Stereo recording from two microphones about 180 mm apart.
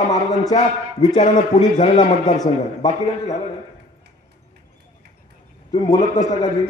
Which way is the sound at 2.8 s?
35° left (ahead or behind).